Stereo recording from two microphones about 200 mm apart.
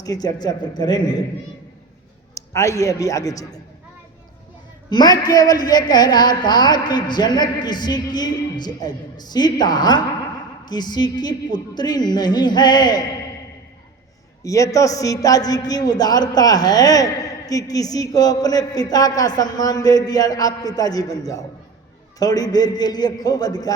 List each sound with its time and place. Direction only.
0.0 s a man's voice: 20° left (ahead or behind)
2.3 s a man's voice: 15° left (ahead or behind)
4.9 s a man's voice: 20° left (ahead or behind)
14.4 s a man's voice: 15° left (ahead or behind)